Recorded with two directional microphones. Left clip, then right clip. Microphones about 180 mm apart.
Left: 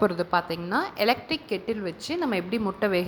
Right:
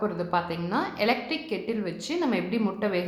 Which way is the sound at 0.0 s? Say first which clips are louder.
Left 3 dB; 55° left (ahead or behind).